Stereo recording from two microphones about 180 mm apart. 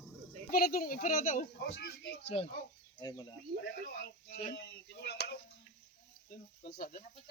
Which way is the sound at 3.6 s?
65° left (ahead or behind).